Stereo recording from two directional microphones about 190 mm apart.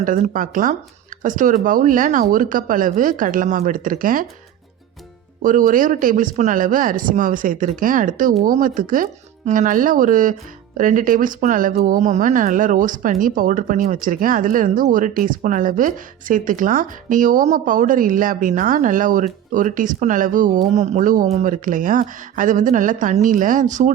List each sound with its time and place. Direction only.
0.0 s speech: 45° right (ahead or behind)
5.4 s speech: 45° right (ahead or behind)